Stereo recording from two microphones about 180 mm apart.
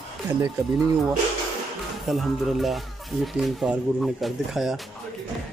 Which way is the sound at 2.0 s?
Centre (ahead or behind).